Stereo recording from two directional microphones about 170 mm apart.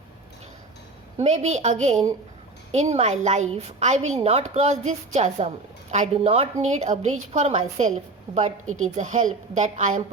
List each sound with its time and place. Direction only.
1.2 s a woman's voice: 40° right (ahead or behind)
8.3 s a woman's voice: 25° right (ahead or behind)
9.0 s a woman's voice: 45° right (ahead or behind)